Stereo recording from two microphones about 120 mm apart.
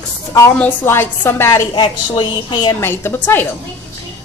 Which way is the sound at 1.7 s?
45° left (ahead or behind).